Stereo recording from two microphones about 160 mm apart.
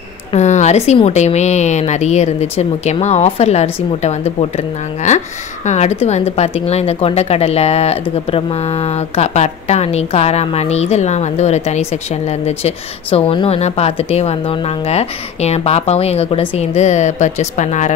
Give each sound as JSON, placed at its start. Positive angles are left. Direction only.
{"t": 0.3, "sound": "speech", "side_deg": 45}